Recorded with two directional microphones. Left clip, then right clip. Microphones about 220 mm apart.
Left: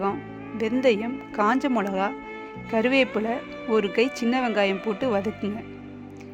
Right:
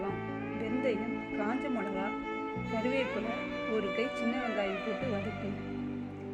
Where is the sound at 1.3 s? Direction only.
45° left (ahead or behind).